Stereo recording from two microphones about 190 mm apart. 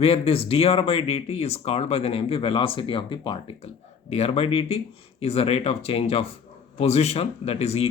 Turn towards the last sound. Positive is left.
turn(degrees=30)  # may be behind; listen again after turning